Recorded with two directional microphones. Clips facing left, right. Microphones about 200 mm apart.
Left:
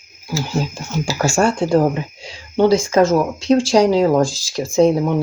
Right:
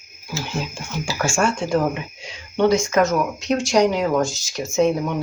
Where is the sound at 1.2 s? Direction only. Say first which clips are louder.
Left 5 dB; 35° left (ahead or behind).